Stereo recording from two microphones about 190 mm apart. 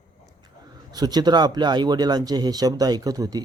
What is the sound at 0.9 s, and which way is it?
Speech, 20° right (ahead or behind).